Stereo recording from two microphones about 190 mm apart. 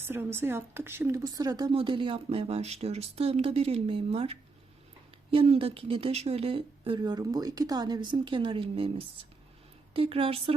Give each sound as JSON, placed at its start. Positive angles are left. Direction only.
{"t": 0.0, "sound": "a woman's voice", "side_deg": -10}